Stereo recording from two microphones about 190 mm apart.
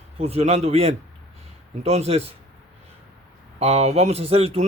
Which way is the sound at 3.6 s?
35° right (ahead or behind).